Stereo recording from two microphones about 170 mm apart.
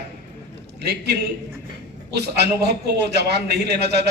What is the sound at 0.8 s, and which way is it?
A man's voice, 75° right (ahead or behind).